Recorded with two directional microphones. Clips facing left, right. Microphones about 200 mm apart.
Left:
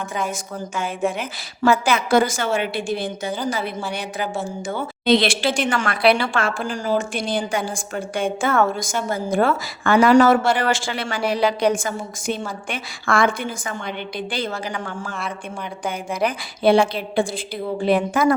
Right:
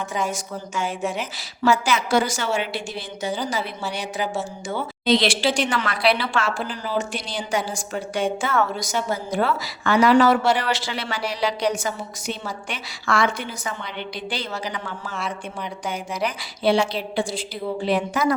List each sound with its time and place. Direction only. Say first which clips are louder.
1.0 s a woman's voice: left 3 dB; 55° left (ahead or behind)